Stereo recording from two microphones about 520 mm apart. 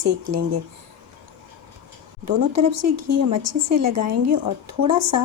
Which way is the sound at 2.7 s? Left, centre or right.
Right.